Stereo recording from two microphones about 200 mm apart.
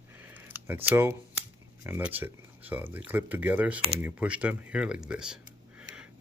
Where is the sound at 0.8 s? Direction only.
10° right (ahead or behind).